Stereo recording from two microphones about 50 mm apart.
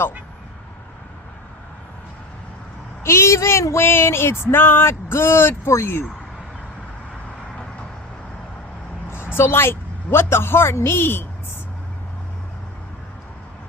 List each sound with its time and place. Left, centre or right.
3.0 s speech: left
3.8 s speech: left
9.0 s a woman's voice: left